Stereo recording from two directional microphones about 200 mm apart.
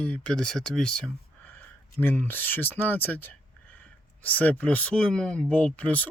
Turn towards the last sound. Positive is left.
turn(degrees=5)  # may be behind; listen again after turning